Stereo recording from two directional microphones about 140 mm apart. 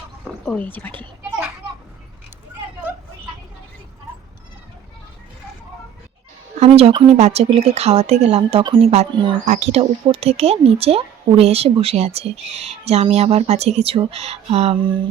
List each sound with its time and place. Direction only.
0.4 s speech: 10° left (ahead or behind)
6.6 s speech: 45° right (ahead or behind)
9.5 s speech: 50° right (ahead or behind)